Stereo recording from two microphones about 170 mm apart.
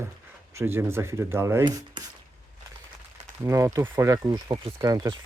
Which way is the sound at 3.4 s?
20° right (ahead or behind).